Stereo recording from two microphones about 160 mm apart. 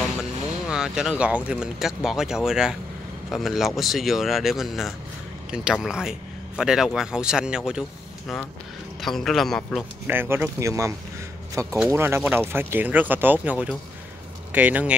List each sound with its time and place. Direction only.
0.7 s a man's voice: 5° right (ahead or behind)
9.0 s a man's voice: centre (ahead or behind)
10.0 s speech: 15° right (ahead or behind)